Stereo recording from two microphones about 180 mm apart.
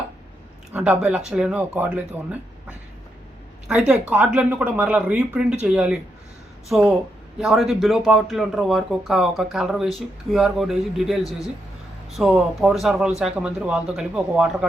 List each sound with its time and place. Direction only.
0.7 s speech: 5° right (ahead or behind)
3.8 s speech: 5° right (ahead or behind)